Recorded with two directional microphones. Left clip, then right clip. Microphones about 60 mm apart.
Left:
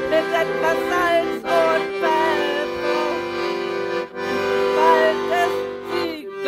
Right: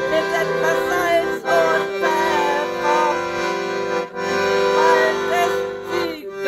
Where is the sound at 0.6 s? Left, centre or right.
Centre.